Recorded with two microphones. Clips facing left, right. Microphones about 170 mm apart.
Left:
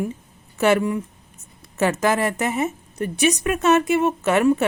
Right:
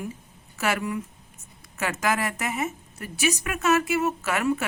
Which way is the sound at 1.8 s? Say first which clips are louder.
Left 7 dB; 25° left (ahead or behind).